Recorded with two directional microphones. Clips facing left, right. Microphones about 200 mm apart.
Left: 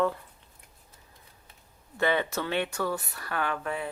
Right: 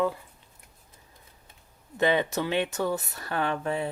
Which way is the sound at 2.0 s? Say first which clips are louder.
Right 3 dB; 15° right (ahead or behind).